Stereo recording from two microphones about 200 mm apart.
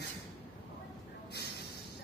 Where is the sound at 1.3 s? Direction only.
55° left (ahead or behind).